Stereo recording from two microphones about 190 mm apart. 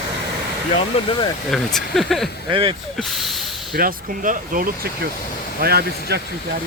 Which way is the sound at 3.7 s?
50° right (ahead or behind).